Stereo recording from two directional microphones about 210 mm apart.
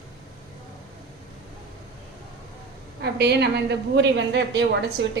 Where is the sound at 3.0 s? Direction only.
50° right (ahead or behind).